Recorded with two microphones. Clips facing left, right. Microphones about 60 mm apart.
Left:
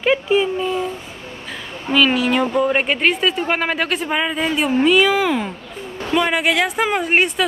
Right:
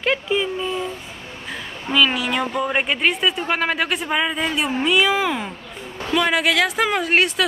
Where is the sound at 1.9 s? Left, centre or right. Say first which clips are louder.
Left 3 dB; centre.